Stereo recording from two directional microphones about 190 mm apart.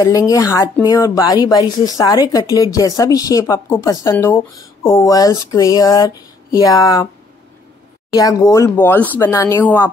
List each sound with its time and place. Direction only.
0.3 s speech: 15° left (ahead or behind)
8.1 s speech: 20° left (ahead or behind)